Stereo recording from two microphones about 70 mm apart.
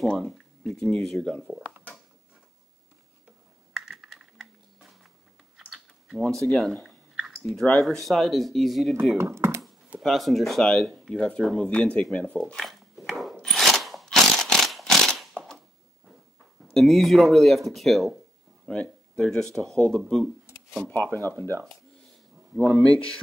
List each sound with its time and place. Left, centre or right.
0.0 s speech: centre
3.7 s typing: centre
6.2 s speech: centre
7.2 s clicking: centre
7.8 s speech: centre
9.2 s speech: right
9.9 s speech: centre
12.6 s a sound: centre
16.7 s speech: centre
18.7 s speech: centre
20.9 s speech: left
22.7 s speech: centre